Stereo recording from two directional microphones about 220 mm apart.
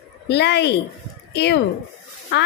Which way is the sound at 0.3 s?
50° left (ahead or behind).